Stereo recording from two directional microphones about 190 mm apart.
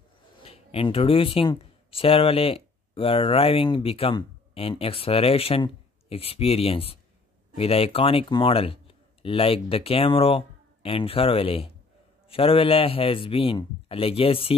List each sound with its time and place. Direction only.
0.4 s a man's voice: 30° left (ahead or behind)